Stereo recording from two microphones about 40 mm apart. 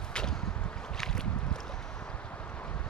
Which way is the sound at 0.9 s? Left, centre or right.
Centre.